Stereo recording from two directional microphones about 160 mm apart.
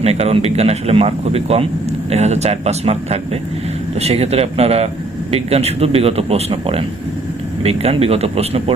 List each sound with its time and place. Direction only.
0.0 s speech: 40° right (ahead or behind)